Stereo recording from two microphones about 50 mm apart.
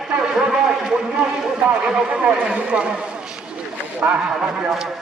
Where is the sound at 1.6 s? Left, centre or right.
Right.